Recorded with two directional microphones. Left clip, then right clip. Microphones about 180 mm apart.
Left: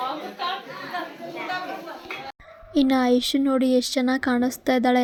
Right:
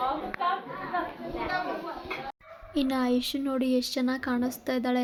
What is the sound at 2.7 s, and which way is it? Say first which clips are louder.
Speech: left 7 dB; 35° left (ahead or behind).